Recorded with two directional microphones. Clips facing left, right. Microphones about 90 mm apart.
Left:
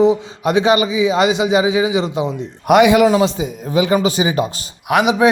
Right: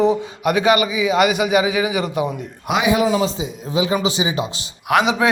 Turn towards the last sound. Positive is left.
turn(degrees=20)  # may be behind; listen again after turning